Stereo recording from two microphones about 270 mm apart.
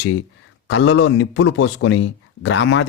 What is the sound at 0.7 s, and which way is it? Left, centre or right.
Speech, left.